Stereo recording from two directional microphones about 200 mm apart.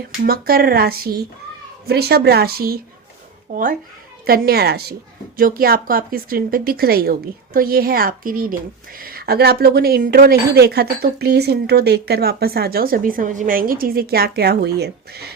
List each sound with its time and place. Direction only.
0.2 s speech: 50° right (ahead or behind)